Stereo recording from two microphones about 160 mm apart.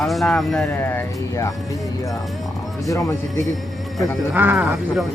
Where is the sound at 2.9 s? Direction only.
20° left (ahead or behind).